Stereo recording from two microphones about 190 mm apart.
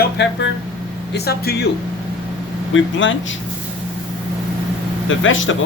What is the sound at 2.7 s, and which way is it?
Speech, 85° left.